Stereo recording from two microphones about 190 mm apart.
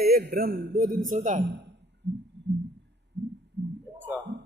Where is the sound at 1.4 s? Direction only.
65° right (ahead or behind).